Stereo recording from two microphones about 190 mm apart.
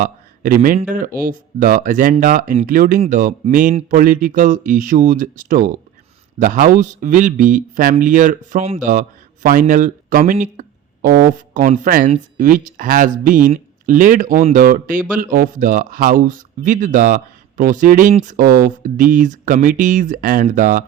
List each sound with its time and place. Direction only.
0.0 s a man's voice: 45° right (ahead or behind)